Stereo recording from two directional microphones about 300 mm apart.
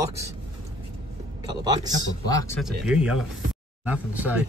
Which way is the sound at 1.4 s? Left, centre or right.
Centre.